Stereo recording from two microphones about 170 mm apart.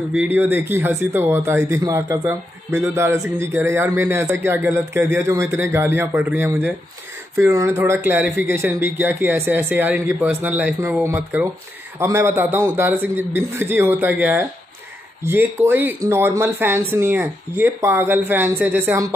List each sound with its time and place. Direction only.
0.1 s speech: 10° right (ahead or behind)